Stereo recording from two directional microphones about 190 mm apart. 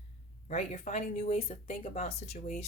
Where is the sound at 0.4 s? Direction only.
35° left (ahead or behind).